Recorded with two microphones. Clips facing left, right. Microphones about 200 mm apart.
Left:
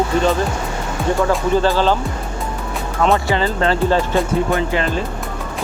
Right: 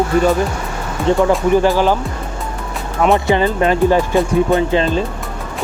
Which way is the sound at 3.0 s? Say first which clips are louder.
Right 3 dB; 20° right (ahead or behind).